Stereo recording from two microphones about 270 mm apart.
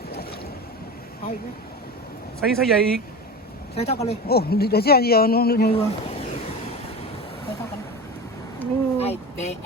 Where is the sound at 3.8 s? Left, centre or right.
Left.